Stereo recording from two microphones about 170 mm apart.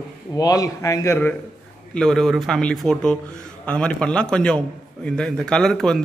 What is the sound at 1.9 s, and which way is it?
A man's voice, 5° left (ahead or behind).